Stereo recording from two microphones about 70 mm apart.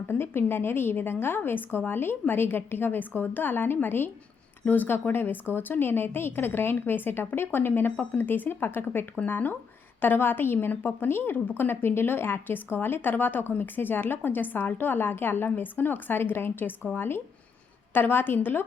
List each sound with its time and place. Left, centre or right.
0.1 s a woman's voice: left